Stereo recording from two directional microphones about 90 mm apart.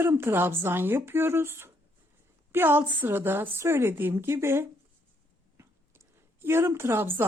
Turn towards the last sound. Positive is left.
turn(degrees=-25)  # may be behind; listen again after turning